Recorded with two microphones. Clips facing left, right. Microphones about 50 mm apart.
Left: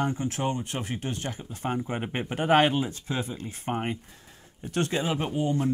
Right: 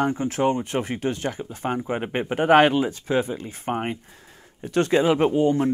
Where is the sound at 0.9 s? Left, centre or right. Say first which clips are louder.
Right 7 dB; right.